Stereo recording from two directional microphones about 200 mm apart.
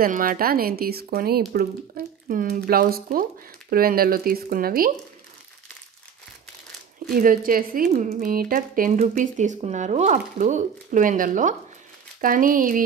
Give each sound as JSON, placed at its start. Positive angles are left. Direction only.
{"t": 0.0, "sound": "speech", "side_deg": -45}
{"t": 7.1, "sound": "speech", "side_deg": -45}